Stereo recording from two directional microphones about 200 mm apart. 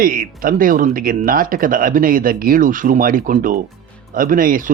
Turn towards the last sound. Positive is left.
turn(degrees=-45)  # may be behind; listen again after turning